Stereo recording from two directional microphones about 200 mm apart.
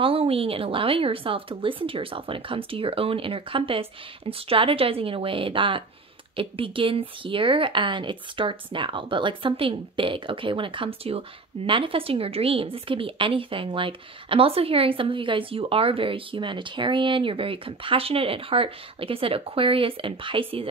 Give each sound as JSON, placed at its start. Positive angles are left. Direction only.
{"t": 0.0, "sound": "speech", "side_deg": -30}